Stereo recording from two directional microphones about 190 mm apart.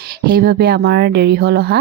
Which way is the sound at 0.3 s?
55° right (ahead or behind).